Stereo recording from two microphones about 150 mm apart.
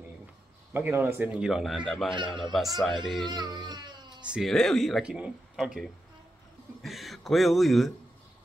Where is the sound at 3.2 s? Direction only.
30° right (ahead or behind).